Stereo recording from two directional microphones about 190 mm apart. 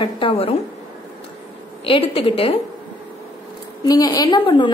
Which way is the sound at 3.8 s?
20° left (ahead or behind).